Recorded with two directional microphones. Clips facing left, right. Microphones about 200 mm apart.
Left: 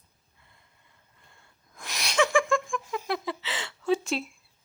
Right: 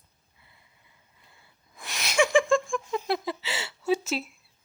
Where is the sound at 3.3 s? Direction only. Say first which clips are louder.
Right 1 dB; 10° right (ahead or behind).